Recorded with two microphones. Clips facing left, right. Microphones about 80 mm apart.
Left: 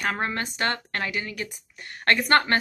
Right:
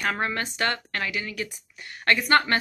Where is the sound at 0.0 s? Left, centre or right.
Left.